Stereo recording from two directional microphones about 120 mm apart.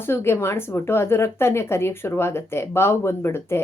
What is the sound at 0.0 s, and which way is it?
Speech, 20° left (ahead or behind).